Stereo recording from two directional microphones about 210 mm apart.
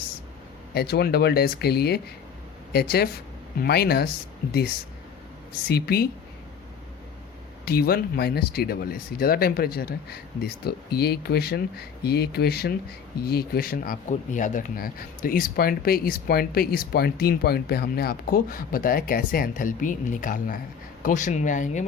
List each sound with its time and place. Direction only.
0.7 s speech: 50° left (ahead or behind)
5.6 s speech: 50° left (ahead or behind)
7.6 s speech: 50° left (ahead or behind)